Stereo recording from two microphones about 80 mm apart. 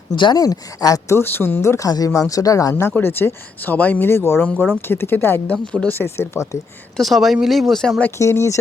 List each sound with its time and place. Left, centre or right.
0.3 s speech: left
1.1 s speech: left
2.9 s speech: left
4.4 s speech: centre
4.9 s speech: left
6.9 s speech: centre
8.2 s speech: left